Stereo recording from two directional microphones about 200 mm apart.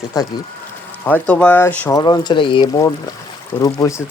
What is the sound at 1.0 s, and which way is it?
Speech, 5° left (ahead or behind).